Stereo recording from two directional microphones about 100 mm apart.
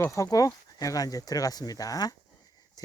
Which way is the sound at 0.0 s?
30° left (ahead or behind).